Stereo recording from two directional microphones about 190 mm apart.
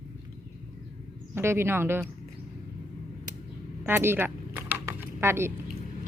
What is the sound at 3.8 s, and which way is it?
Typing, 10° right (ahead or behind).